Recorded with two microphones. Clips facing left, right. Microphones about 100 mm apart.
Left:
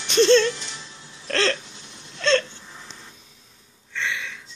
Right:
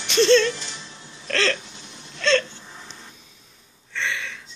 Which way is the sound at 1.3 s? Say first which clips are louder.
Even; 25° left (ahead or behind).